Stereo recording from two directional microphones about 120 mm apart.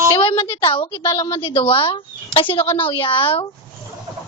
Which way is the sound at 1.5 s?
45° left (ahead or behind).